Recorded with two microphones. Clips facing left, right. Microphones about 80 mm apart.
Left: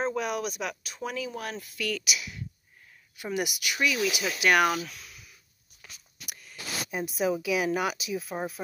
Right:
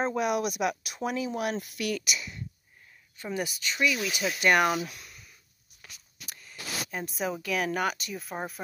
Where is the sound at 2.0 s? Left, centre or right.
Centre.